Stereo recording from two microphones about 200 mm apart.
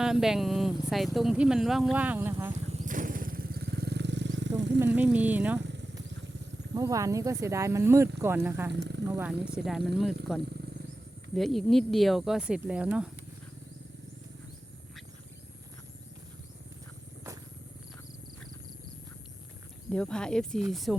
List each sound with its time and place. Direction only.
0.0 s speech: centre (ahead or behind)
2.6 s vehicle: 35° right (ahead or behind); by 4.8 s 65° right (ahead or behind)
4.9 s speech: 5° right (ahead or behind)
5.5 s motorcycle: 60° right (ahead or behind)
6.7 s speech: 15° right (ahead or behind)
8.7 s speech: 60° right (ahead or behind)
9.1 s speech: 5° right (ahead or behind)
19.9 s speech: 5° left (ahead or behind)